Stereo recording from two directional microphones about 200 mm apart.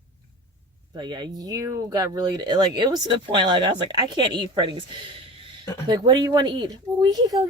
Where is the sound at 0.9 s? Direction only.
20° right (ahead or behind).